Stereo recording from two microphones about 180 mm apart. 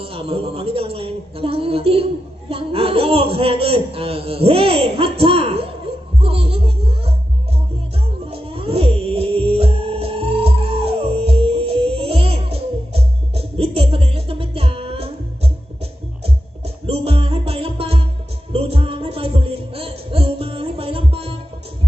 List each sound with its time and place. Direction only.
0.0 s a man's voice: 30° right (ahead or behind)
6.2 s music: 30° right (ahead or behind)
8.3 s music: 30° right (ahead or behind)